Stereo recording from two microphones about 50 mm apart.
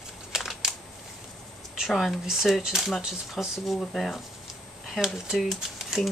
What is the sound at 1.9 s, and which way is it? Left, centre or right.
Speech, centre.